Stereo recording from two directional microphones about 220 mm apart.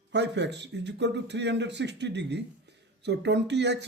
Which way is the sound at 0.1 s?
50° right (ahead or behind).